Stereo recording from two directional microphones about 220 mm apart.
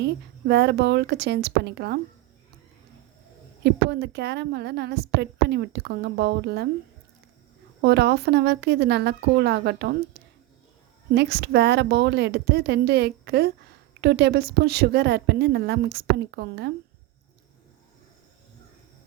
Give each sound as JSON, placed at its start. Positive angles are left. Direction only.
{"t": 0.0, "sound": "a woman's voice", "side_deg": -50}
{"t": 3.6, "sound": "a woman's voice", "side_deg": -50}
{"t": 7.8, "sound": "a woman's voice", "side_deg": -50}
{"t": 10.2, "sound": "a sound", "side_deg": -50}
{"t": 11.1, "sound": "a woman's voice", "side_deg": -50}